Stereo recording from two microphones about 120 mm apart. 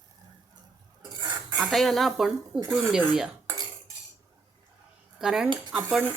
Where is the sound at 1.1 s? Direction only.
40° right (ahead or behind).